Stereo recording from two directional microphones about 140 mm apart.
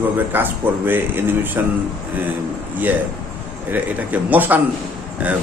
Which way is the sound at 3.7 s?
10° right (ahead or behind).